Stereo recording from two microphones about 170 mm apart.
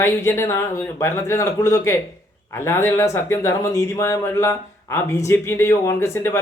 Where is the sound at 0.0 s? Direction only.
15° left (ahead or behind).